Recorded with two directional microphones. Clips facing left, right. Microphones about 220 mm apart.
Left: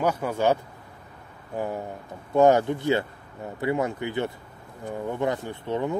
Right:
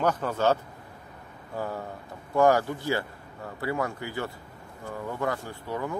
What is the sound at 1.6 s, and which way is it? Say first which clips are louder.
A man's voice: left 3 dB; 20° left (ahead or behind).